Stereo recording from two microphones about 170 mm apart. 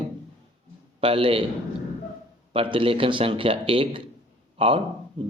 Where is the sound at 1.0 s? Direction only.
35° right (ahead or behind).